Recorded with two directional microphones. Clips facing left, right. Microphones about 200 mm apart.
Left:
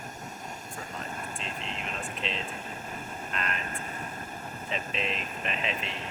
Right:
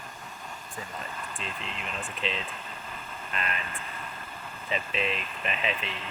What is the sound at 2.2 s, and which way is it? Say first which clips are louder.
Speech: right 3 dB; centre (ahead or behind).